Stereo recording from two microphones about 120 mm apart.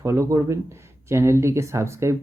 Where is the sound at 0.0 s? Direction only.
25° right (ahead or behind).